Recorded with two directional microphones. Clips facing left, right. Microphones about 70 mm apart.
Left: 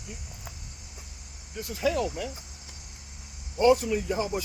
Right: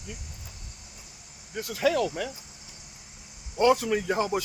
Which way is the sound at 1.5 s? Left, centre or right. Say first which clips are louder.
Right 2 dB; right.